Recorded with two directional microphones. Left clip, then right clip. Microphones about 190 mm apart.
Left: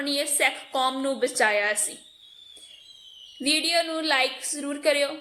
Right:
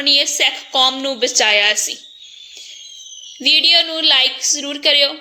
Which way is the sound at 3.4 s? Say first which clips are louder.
Right 11 dB; 25° right (ahead or behind).